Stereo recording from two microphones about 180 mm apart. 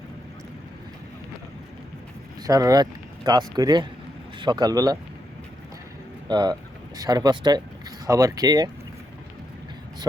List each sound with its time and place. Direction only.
2.4 s speech: 20° right (ahead or behind)
6.2 s speech: 25° right (ahead or behind)